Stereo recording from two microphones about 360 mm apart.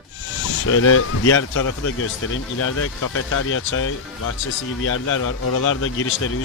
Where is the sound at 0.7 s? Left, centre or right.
Left.